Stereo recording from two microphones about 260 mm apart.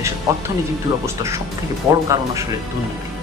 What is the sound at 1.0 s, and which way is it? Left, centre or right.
Speech, centre.